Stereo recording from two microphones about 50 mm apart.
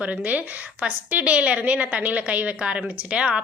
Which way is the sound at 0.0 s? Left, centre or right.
Right.